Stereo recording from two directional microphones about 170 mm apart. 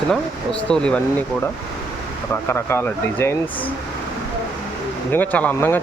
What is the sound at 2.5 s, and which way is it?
Speech, 15° left (ahead or behind).